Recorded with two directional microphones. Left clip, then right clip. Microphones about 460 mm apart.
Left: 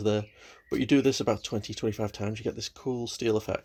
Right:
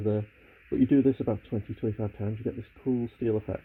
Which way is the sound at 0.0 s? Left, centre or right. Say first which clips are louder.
Left 2 dB; left.